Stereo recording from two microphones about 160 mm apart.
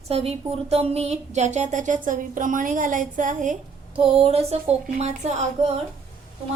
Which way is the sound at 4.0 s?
35° right (ahead or behind).